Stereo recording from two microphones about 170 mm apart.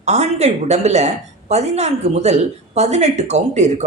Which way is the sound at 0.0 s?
40° right (ahead or behind).